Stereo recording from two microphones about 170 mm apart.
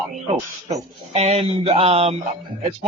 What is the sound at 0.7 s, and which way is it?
A man's voice, 40° right (ahead or behind).